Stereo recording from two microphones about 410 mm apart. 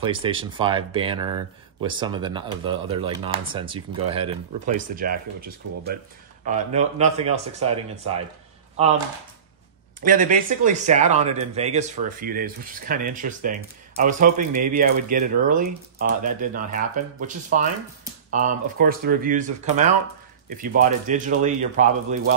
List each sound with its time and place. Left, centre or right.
0.0 s speech: centre
9.9 s speech: centre